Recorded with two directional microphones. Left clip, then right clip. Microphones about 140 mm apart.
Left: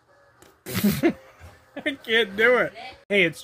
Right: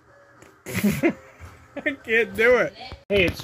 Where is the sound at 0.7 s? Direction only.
15° left (ahead or behind).